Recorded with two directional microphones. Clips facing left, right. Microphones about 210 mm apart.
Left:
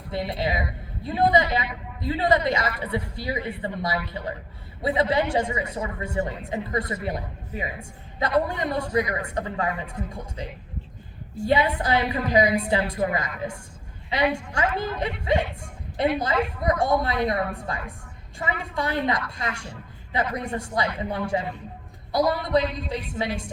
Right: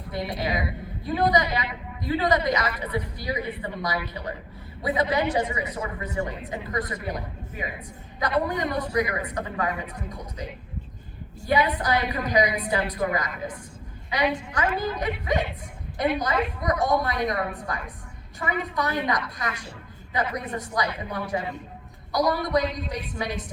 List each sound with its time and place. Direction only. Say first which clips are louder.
0.1 s a woman's voice: left 1 dB; 25° left (ahead or behind)
11.4 s a woman's voice: left 1 dB; 25° left (ahead or behind)